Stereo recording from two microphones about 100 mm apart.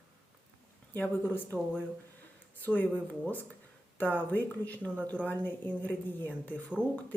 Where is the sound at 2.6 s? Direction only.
20° left (ahead or behind).